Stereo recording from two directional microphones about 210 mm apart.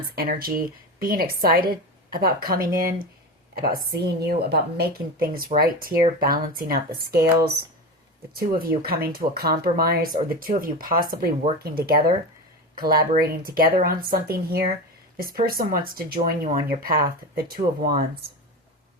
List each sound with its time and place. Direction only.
0.2 s a woman's voice: 45° right (ahead or behind)
8.4 s speech: 45° right (ahead or behind)